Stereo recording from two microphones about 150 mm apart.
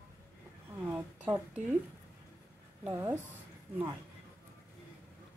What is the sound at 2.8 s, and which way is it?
Speech, 15° right (ahead or behind).